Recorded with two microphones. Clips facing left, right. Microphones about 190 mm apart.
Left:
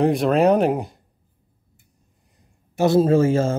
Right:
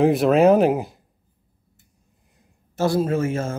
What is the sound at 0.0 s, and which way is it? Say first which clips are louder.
Speech: right 2 dB; centre (ahead or behind).